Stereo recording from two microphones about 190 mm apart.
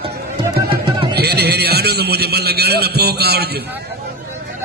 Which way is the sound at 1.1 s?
55° right (ahead or behind).